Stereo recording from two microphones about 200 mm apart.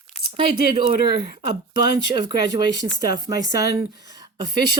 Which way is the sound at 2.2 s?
20° right (ahead or behind).